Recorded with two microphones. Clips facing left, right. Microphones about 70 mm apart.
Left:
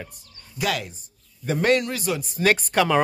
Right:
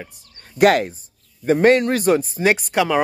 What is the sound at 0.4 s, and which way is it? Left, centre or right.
Speech, right.